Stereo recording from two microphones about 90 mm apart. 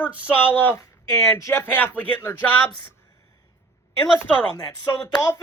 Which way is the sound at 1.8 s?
20° left (ahead or behind).